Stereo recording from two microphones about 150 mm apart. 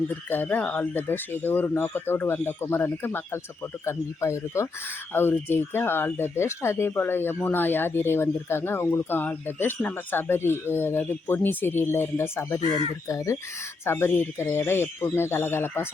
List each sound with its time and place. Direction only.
0.3 s speech: 10° left (ahead or behind)
12.5 s speech: 45° left (ahead or behind)
13.1 s speech: 20° left (ahead or behind)